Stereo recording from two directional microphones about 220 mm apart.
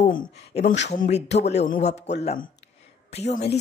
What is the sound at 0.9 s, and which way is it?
A woman's voice, 30° left (ahead or behind).